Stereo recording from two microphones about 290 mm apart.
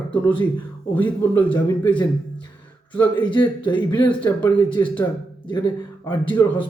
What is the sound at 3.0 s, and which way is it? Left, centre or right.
Speech, centre.